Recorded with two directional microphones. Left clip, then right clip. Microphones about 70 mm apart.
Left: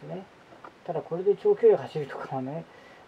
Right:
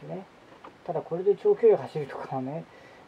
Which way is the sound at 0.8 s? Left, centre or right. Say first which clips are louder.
Even; centre.